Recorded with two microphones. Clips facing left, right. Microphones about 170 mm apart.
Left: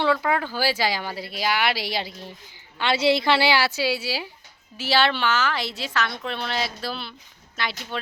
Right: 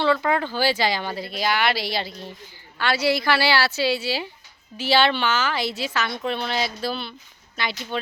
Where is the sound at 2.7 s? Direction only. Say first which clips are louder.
Left 1 dB; 20° left (ahead or behind).